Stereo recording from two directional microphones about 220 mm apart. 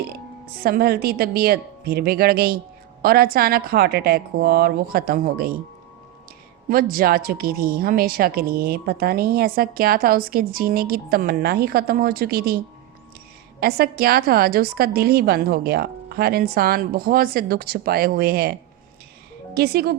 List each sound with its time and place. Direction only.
0.0 s a woman's voice: 45° right (ahead or behind)
6.7 s a woman's voice: 40° right (ahead or behind)
13.6 s a woman's voice: 45° right (ahead or behind)
19.5 s a woman's voice: 45° right (ahead or behind)